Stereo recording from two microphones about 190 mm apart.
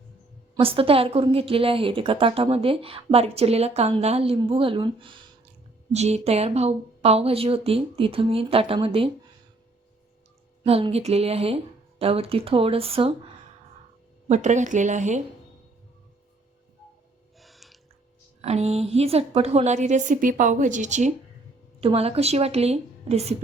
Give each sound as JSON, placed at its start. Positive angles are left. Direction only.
{"t": 0.6, "sound": "a woman's voice", "side_deg": -30}
{"t": 10.6, "sound": "speech", "side_deg": -30}
{"t": 14.3, "sound": "speech", "side_deg": -40}
{"t": 17.4, "sound": "gasp", "side_deg": 0}
{"t": 18.4, "sound": "speech", "side_deg": -35}